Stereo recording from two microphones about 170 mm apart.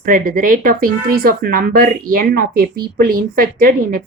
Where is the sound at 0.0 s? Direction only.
55° right (ahead or behind).